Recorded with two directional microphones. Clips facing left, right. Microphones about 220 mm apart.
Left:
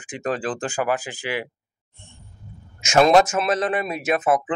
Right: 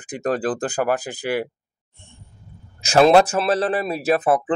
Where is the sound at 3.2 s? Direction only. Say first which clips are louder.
Right 2 dB; 35° right (ahead or behind).